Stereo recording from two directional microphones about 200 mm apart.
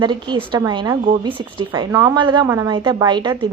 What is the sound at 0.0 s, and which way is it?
A woman's voice, 25° right (ahead or behind).